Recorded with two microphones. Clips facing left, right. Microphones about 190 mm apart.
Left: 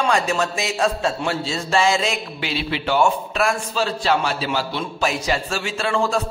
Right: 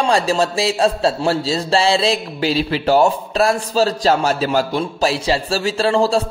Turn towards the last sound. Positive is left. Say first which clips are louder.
# right 5 dB
turn(degrees=-35)  # may be behind; listen again after turning